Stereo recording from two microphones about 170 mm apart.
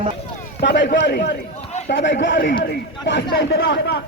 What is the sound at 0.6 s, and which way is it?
A man's voice, 80° left.